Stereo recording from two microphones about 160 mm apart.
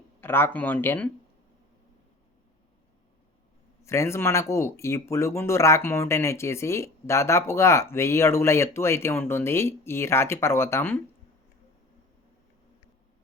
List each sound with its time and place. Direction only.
0.2 s speech: 15° left (ahead or behind)
3.8 s speech: 15° left (ahead or behind)